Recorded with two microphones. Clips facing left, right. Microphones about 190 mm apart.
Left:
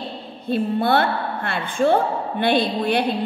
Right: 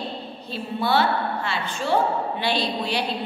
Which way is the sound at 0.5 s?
55° left (ahead or behind).